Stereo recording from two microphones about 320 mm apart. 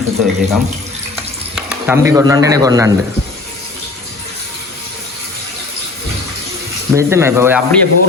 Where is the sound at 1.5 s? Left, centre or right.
Centre.